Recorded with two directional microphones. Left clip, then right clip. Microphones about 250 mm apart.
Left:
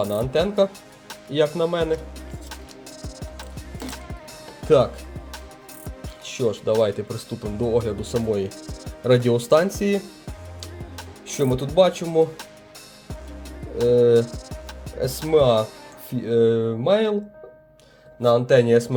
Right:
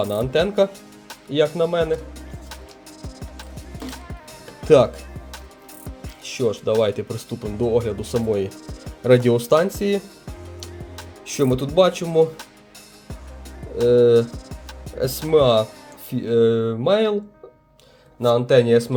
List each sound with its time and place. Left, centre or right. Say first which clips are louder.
0.0 s speech: right 2 dB; centre
1.3 s speech: right 2 dB; centre
3.8 s skateboard: even; left
6.0 s speech: right 2 dB; centre
10.6 s music: even; centre
13.7 s speech: right 2 dB; centre
18.2 s speech: right 1 dB; centre